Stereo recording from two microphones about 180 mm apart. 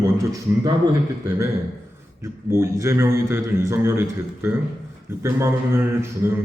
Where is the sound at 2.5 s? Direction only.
15° right (ahead or behind).